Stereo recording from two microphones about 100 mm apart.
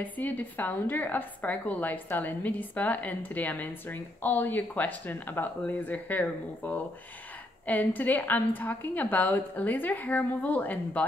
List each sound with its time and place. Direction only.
0.0 s a woman's voice: 20° left (ahead or behind)